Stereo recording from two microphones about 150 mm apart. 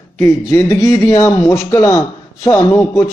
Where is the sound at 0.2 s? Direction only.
20° left (ahead or behind).